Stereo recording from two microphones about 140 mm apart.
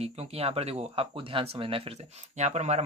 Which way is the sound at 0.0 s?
45° right (ahead or behind).